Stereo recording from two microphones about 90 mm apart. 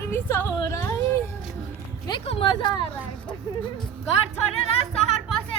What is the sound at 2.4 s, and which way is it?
Speech, 55° left (ahead or behind).